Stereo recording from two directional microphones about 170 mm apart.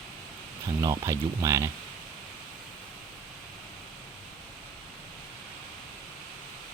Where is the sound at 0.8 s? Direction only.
20° right (ahead or behind).